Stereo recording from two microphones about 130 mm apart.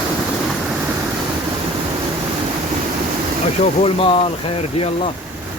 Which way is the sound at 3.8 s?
45° left (ahead or behind).